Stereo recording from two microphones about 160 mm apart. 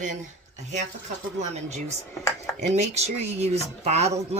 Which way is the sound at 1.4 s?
45° right (ahead or behind).